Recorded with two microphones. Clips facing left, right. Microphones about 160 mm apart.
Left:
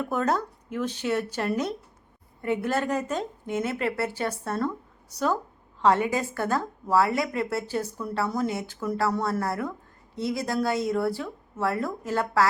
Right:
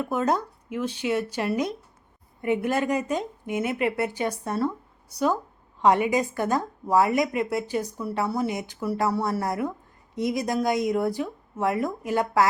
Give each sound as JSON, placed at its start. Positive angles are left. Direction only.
{"t": 0.0, "sound": "a woman's voice", "side_deg": -10}